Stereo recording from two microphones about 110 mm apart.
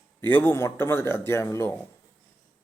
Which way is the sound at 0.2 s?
20° left (ahead or behind).